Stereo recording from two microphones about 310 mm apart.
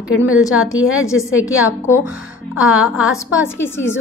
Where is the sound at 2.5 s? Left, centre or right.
Left.